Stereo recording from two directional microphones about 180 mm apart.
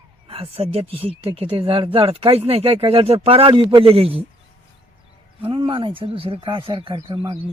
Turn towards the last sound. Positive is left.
turn(degrees=-30)  # may be behind; listen again after turning